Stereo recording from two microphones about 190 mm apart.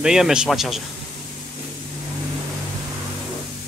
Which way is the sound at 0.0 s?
5° right (ahead or behind).